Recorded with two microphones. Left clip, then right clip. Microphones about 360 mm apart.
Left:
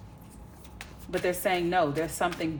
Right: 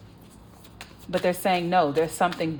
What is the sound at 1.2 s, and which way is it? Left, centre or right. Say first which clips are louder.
Speech: right 3 dB; right.